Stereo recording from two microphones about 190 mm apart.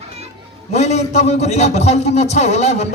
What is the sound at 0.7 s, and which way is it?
A man's voice, 35° left (ahead or behind).